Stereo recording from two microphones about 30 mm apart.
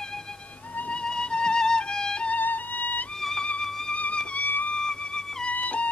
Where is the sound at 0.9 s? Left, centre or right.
Left.